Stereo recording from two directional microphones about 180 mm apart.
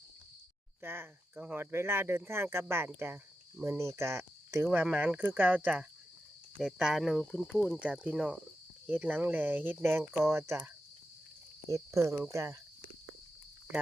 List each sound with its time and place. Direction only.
0.8 s speech: 10° right (ahead or behind)
11.7 s speech: 15° right (ahead or behind)